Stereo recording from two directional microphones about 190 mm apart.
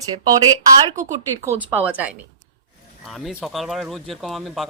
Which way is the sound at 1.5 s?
10° right (ahead or behind).